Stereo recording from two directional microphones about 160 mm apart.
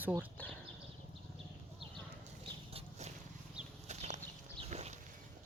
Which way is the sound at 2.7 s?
45° right (ahead or behind).